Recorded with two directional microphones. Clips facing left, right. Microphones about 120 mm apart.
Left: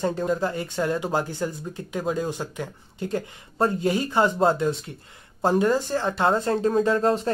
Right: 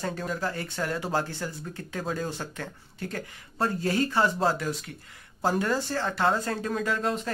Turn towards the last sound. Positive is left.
turn(degrees=35)  # may be behind; listen again after turning